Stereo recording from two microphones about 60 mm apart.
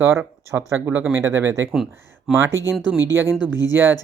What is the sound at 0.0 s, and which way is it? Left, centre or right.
Speech, right.